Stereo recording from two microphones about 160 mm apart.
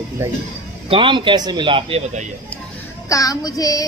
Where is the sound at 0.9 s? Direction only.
30° right (ahead or behind).